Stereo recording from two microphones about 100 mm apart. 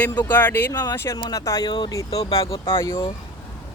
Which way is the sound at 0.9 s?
25° left (ahead or behind).